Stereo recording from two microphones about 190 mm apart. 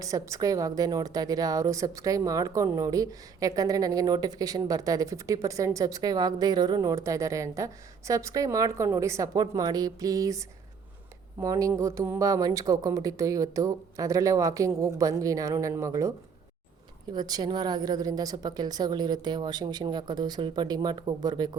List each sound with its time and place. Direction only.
0.0 s a woman's voice: 15° right (ahead or behind)